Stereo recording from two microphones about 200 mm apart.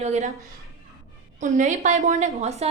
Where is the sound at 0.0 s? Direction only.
35° right (ahead or behind).